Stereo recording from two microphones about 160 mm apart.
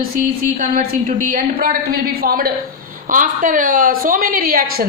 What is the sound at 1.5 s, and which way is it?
Speech, 70° right (ahead or behind).